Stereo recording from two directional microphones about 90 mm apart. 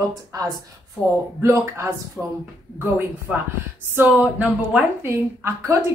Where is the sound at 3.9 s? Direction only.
20° right (ahead or behind).